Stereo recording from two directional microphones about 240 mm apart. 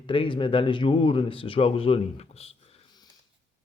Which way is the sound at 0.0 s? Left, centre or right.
Left.